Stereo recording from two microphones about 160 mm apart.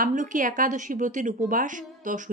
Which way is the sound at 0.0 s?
55° right (ahead or behind).